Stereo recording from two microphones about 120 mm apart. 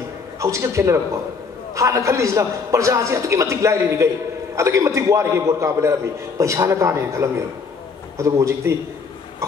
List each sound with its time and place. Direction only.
0.4 s a man's voice: 25° right (ahead or behind)